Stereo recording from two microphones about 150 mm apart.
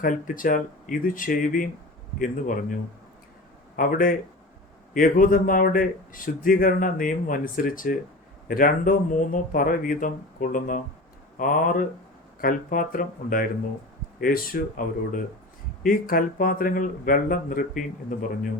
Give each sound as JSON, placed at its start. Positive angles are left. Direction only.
{"t": 0.0, "sound": "speech", "side_deg": 65}
{"t": 3.8, "sound": "speech", "side_deg": 65}